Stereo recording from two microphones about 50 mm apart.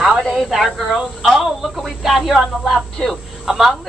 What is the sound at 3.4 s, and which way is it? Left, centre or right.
Speech, centre.